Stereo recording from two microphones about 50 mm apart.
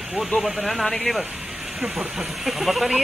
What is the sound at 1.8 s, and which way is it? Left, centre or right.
Speech, centre.